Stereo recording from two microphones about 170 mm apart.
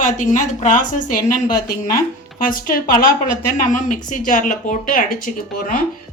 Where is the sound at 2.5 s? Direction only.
55° left (ahead or behind).